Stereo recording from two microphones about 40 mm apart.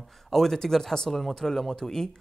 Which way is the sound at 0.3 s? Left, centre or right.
Centre.